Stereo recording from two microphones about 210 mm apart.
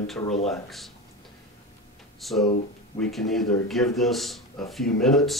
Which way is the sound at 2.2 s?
Centre (ahead or behind).